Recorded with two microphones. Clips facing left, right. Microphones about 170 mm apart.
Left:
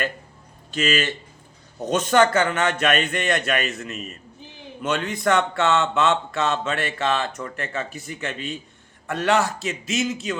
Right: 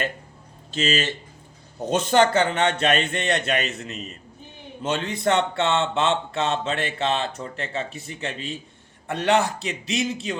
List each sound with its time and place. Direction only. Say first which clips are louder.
0.7 s a man's voice: left 1 dB; 30° right (ahead or behind)